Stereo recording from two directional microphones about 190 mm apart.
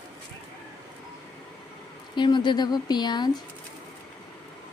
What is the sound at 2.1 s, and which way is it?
Speech, 25° left (ahead or behind).